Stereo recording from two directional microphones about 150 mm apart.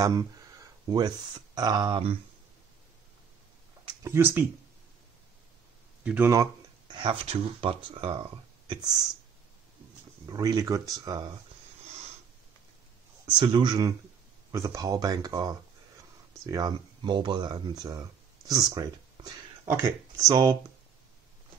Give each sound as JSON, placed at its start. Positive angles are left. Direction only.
{"t": 0.0, "sound": "speech", "side_deg": -25}
{"t": 4.0, "sound": "speech", "side_deg": -15}
{"t": 6.0, "sound": "speech", "side_deg": -10}
{"t": 6.3, "sound": "a sound", "side_deg": -20}
{"t": 7.0, "sound": "speech", "side_deg": -35}
{"t": 10.2, "sound": "speech", "side_deg": -25}
{"t": 13.4, "sound": "speech", "side_deg": -30}